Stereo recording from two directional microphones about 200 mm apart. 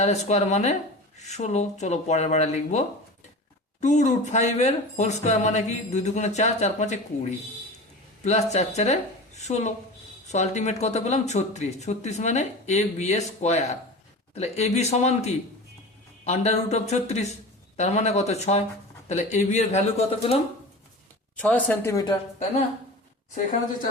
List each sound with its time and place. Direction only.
0.0 s speech: 35° left (ahead or behind)
21.3 s speech: 5° left (ahead or behind)
23.3 s a woman's voice: 40° left (ahead or behind)